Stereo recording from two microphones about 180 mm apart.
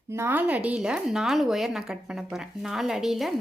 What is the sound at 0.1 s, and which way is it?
A woman's voice, 10° right (ahead or behind).